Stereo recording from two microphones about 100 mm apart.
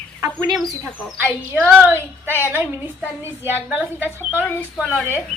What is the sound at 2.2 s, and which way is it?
Child singing, 25° left (ahead or behind).